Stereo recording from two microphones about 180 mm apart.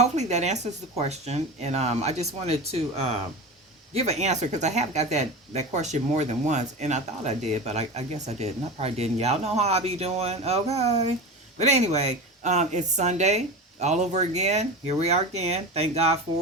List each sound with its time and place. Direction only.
0.0 s speech: 40° right (ahead or behind)